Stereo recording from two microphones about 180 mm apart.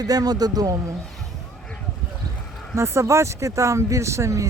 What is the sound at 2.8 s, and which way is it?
Speech, 15° right (ahead or behind).